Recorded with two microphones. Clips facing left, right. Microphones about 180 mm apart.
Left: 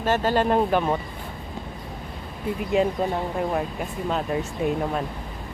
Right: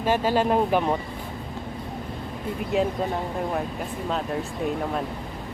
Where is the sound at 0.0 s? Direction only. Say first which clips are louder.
Even; 10° right (ahead or behind).